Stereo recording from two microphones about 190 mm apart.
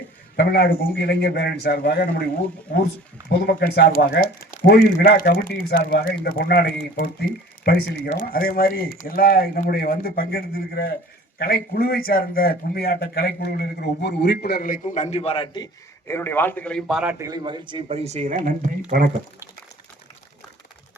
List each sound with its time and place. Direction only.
0.3 s speech: 60° left (ahead or behind)
3.2 s a man's voice: 60° left (ahead or behind); by 19.1 s 45° right (ahead or behind)